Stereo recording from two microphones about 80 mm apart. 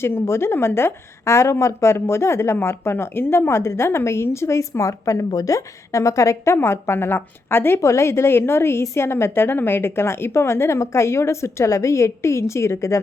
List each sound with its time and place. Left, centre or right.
0.0 s a woman's voice: left